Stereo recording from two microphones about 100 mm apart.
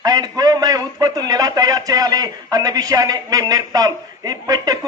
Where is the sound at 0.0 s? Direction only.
40° right (ahead or behind).